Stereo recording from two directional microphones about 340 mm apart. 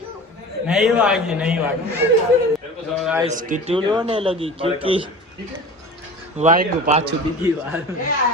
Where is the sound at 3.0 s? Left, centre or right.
Centre.